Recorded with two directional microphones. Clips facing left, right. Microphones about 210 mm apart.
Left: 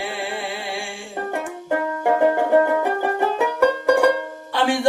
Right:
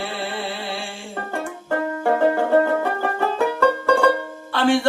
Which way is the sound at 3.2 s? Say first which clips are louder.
Even; 15° left (ahead or behind).